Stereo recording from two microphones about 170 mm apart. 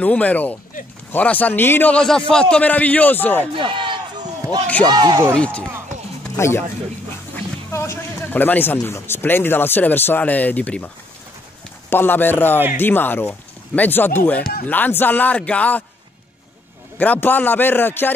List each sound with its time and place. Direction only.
0.0 s speech: 10° left (ahead or behind)
3.5 s speech: 30° right (ahead or behind)
5.3 s speech: 5° left (ahead or behind)
11.9 s speech: 10° left (ahead or behind)
17.0 s speech: 10° left (ahead or behind)